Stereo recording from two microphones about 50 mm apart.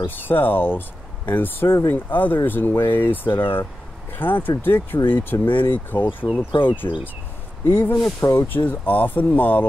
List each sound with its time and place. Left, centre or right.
0.0 s speech: left